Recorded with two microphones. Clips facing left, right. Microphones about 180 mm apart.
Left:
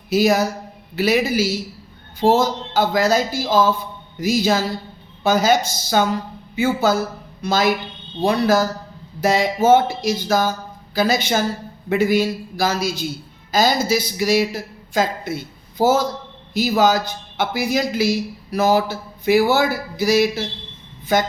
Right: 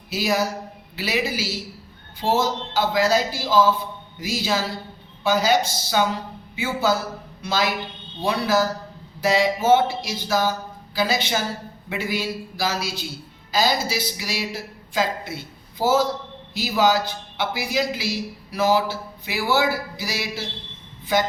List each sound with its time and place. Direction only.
0.1 s speech: 45° left (ahead or behind)